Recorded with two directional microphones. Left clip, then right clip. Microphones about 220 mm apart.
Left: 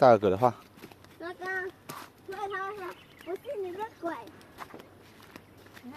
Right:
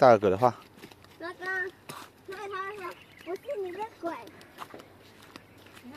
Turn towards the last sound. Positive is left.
turn(degrees=-10)  # may be behind; listen again after turning